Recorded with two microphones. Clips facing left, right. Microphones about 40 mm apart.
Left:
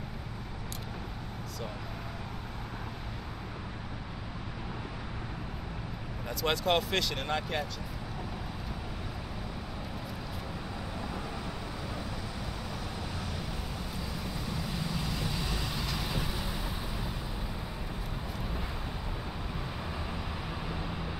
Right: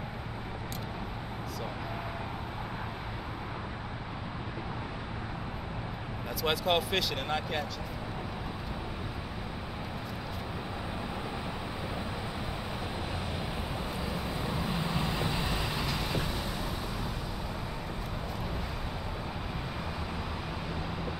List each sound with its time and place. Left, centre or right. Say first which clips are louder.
6.4 s speech: even; centre
13.9 s vehicle: right 3 dB; right